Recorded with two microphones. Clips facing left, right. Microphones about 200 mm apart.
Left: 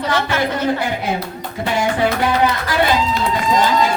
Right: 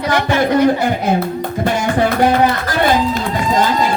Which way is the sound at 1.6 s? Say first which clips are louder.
Right 1 dB; 45° right (ahead or behind).